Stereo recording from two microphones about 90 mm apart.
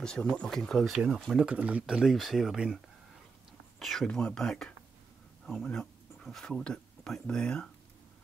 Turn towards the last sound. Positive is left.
turn(degrees=10)  # may be behind; listen again after turning